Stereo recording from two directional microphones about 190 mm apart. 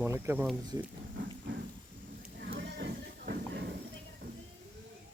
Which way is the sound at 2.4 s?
65° right (ahead or behind).